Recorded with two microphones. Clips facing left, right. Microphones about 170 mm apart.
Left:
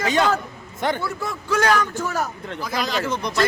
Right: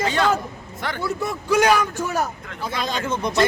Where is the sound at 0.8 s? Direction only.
20° left (ahead or behind).